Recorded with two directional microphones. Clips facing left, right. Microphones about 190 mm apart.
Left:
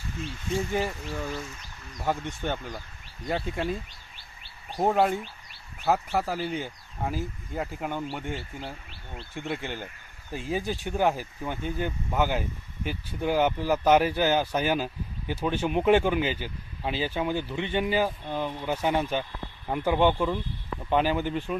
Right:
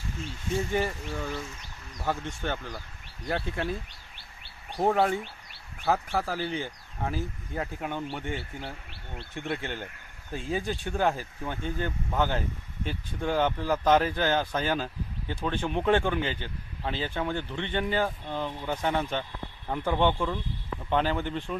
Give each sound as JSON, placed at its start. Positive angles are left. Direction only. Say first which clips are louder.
{"t": 0.7, "sound": "speech", "louder": "even", "side_deg": 10}
{"t": 4.8, "sound": "speech", "louder": "left 1 dB", "side_deg": 5}
{"t": 9.6, "sound": "speech", "louder": "even", "side_deg": 10}